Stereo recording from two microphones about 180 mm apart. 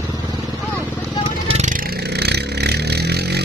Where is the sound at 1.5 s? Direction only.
45° right (ahead or behind); by 3.4 s 65° right (ahead or behind).